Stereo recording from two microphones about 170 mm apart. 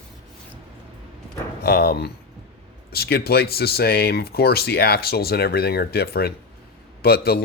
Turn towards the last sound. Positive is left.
turn(degrees=65)  # may be behind; listen again after turning